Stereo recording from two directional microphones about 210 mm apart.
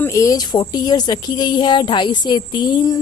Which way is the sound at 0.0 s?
15° left (ahead or behind).